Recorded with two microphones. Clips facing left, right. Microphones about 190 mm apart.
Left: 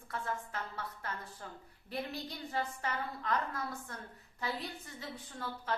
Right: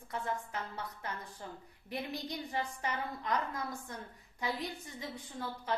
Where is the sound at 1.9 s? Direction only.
15° right (ahead or behind).